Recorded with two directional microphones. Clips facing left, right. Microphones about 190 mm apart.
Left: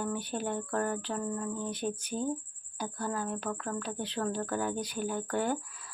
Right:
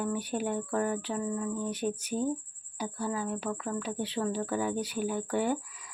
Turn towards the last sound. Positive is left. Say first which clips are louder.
# right 2 dB
turn(degrees=-10)  # may be behind; listen again after turning